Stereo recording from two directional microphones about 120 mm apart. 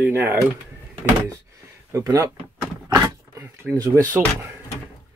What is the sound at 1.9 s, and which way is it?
Speech, 25° right (ahead or behind).